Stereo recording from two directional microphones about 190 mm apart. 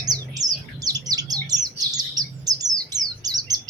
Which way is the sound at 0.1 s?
20° right (ahead or behind).